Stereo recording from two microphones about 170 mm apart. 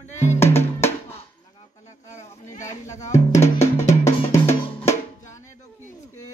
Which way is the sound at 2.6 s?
20° left (ahead or behind).